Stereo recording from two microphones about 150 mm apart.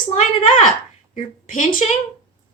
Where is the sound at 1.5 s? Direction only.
60° left (ahead or behind).